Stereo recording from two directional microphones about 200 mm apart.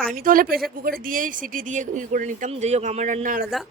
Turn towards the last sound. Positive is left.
turn(degrees=-40)  # may be behind; listen again after turning